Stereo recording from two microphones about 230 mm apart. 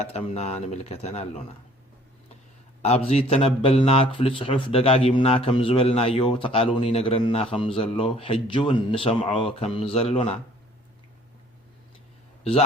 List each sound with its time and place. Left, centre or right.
0.0 s speech: left
2.8 s speech: left